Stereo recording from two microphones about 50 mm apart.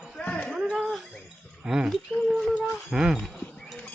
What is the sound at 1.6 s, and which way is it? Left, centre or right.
Speech, centre.